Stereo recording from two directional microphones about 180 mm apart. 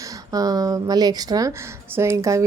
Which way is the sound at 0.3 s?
20° right (ahead or behind).